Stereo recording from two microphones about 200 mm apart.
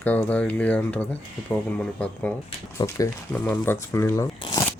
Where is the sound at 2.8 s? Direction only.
25° left (ahead or behind).